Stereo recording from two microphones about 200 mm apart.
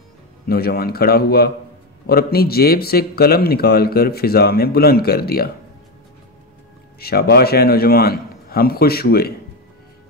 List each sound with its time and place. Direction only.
0.5 s speech: 50° left (ahead or behind)
7.0 s speech: 50° left (ahead or behind)